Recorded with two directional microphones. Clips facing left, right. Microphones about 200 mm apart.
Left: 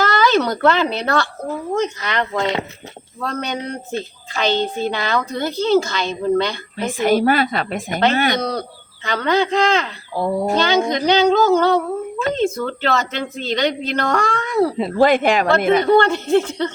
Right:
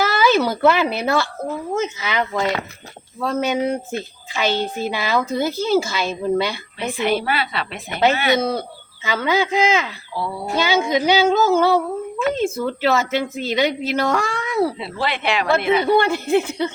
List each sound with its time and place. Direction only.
0.0 s a woman's voice: 10° right (ahead or behind)
6.7 s speech: 45° left (ahead or behind)
8.4 s speech: 5° right (ahead or behind)
10.2 s speech: 45° left (ahead or behind)
10.5 s a woman's voice: 5° right (ahead or behind)
14.8 s speech: 45° left (ahead or behind)
15.8 s a woman's voice: 10° right (ahead or behind)